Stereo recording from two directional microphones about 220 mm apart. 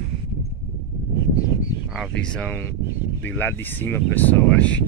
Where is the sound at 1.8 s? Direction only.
Centre (ahead or behind).